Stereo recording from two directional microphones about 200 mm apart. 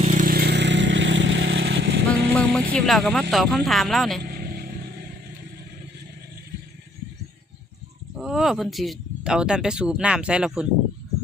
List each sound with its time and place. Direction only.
0.0 s vehicle: 40° right (ahead or behind); by 2.0 s 60° right (ahead or behind)
2.3 s music: 5° left (ahead or behind)
2.7 s speech: centre (ahead or behind)
4.2 s vehicle: 45° right (ahead or behind)
8.1 s speech: centre (ahead or behind)